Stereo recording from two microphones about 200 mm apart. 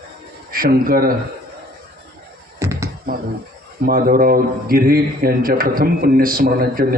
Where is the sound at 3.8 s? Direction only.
45° right (ahead or behind).